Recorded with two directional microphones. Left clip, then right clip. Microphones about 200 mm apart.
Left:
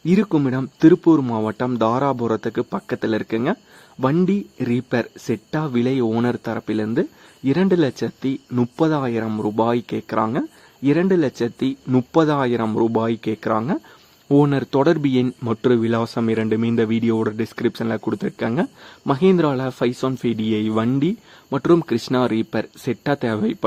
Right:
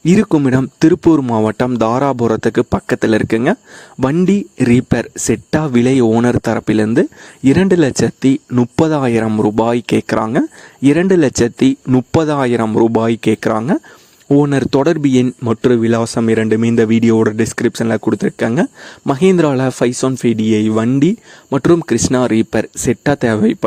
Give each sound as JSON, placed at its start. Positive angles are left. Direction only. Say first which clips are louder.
{"t": 0.0, "sound": "a man's voice", "louder": "right 7 dB", "side_deg": -45}